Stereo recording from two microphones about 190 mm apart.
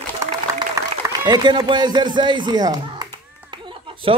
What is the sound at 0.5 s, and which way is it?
A man's voice, 20° right (ahead or behind).